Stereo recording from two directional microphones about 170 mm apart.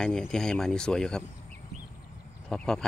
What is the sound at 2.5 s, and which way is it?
Speech, 5° left (ahead or behind).